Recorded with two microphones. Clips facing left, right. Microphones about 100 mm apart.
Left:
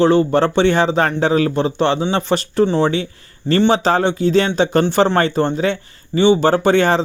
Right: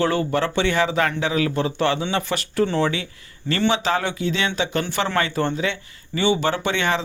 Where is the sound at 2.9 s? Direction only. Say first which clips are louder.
Left 8 dB; 35° left (ahead or behind).